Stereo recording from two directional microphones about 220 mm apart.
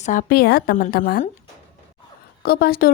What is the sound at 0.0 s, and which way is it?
Speech, 35° left (ahead or behind).